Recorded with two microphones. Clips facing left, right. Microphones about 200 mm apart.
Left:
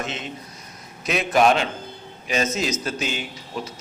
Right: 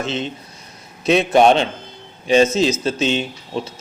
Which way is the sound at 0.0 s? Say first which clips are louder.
Right 7 dB; 30° right (ahead or behind).